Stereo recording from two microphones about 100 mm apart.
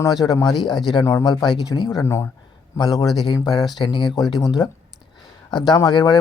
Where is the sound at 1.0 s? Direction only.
30° left (ahead or behind).